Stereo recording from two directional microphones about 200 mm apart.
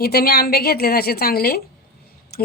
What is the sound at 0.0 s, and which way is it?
Speech, 50° left (ahead or behind).